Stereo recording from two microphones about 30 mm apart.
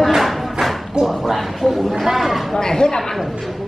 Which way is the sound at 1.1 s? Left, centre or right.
Centre.